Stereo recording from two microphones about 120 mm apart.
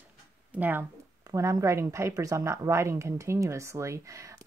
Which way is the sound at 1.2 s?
25° right (ahead or behind).